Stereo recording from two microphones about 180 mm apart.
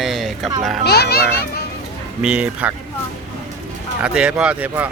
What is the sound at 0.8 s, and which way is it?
Speech, 60° left (ahead or behind).